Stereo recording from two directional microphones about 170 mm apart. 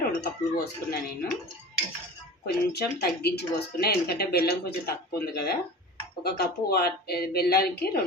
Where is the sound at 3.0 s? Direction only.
70° left (ahead or behind).